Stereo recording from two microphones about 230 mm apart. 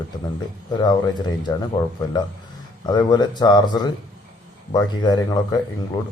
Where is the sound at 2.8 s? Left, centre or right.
Centre.